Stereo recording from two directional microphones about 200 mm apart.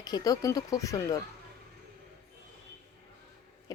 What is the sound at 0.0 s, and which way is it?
A woman's voice, 20° left (ahead or behind).